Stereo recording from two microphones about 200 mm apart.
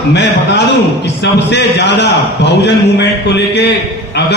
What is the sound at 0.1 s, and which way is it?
A man's voice, 60° left (ahead or behind).